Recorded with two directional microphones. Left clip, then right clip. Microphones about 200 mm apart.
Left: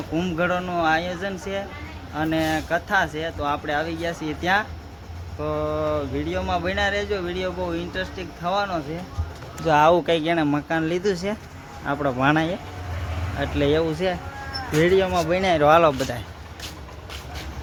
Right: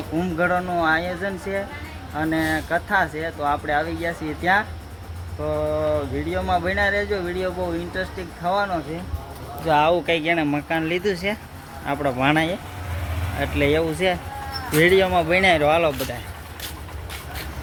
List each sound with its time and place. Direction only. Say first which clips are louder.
0.2 s speech: right 2 dB; centre (ahead or behind)
9.6 s speech: left 1 dB; 25° left (ahead or behind); by 15.6 s 5° left (ahead or behind)
15.6 s speech: left 3 dB; 25° left (ahead or behind)